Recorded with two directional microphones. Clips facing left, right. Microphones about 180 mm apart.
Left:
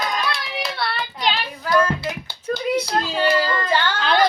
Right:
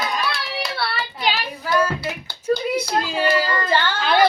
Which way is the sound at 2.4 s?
10° right (ahead or behind).